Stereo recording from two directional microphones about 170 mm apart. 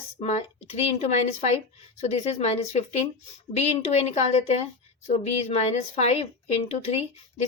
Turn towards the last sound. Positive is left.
turn(degrees=40)  # may be behind; listen again after turning